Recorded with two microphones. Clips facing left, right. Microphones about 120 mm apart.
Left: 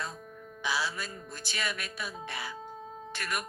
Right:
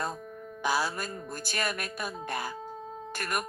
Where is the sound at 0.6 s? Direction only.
45° right (ahead or behind).